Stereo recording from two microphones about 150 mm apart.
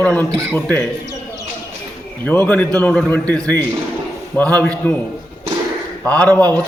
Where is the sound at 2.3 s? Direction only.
10° left (ahead or behind).